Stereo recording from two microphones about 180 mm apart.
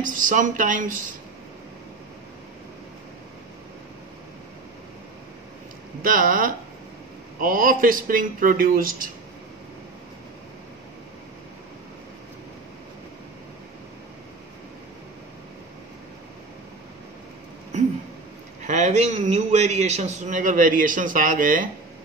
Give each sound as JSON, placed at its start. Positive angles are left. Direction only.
{"t": 0.0, "sound": "a man's voice", "side_deg": -50}
{"t": 6.0, "sound": "a man's voice", "side_deg": -50}
{"t": 18.6, "sound": "a man's voice", "side_deg": -40}